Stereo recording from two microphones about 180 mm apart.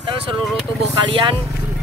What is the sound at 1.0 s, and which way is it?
Speech, 30° right (ahead or behind).